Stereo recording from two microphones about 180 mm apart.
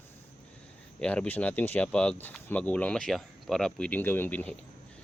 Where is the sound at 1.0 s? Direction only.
5° left (ahead or behind).